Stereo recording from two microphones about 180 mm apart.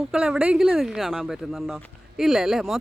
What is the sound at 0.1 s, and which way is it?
Speech, 5° right (ahead or behind).